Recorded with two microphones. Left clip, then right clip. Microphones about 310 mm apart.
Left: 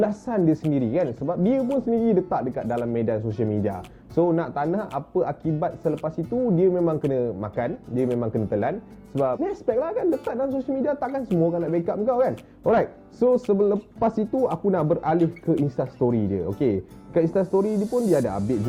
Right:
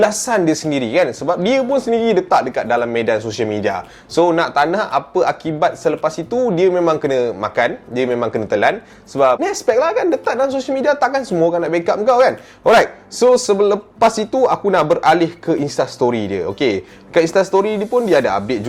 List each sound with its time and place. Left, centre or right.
0.0 s a man's voice: centre
6.3 s speech: centre
6.6 s a man's voice: centre
11.2 s a man's voice: centre
14.3 s a man's voice: centre
14.7 s a man's voice: centre